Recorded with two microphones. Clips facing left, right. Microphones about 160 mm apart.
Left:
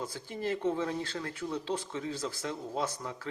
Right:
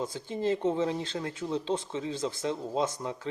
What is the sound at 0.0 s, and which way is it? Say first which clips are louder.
Speech: right 5 dB; 20° right (ahead or behind).